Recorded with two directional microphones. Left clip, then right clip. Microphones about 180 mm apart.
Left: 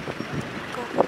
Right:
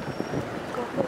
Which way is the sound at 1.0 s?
20° left (ahead or behind).